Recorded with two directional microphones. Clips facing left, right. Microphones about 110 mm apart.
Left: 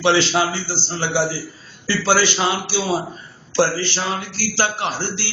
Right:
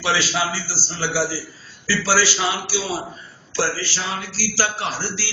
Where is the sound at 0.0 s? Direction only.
25° left (ahead or behind).